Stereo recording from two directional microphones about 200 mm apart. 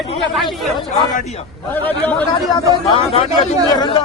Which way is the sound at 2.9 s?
30° left (ahead or behind).